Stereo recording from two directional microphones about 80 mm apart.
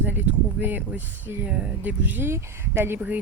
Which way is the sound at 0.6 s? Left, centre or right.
Right.